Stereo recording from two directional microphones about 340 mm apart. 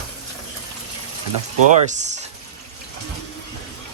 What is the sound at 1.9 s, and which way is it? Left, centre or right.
Speech, centre.